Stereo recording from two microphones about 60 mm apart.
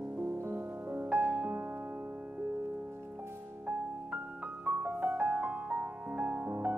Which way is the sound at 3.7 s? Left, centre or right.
Right.